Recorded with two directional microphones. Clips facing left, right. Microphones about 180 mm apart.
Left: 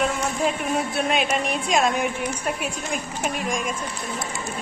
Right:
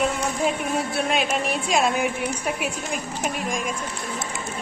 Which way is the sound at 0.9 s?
Centre (ahead or behind).